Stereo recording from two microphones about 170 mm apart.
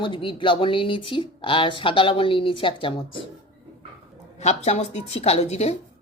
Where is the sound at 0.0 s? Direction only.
30° left (ahead or behind).